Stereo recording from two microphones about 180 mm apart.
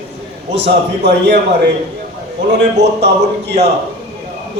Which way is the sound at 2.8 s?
70° right (ahead or behind).